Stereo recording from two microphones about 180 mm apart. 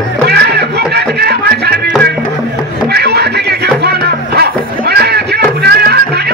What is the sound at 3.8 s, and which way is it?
Music, 65° right (ahead or behind).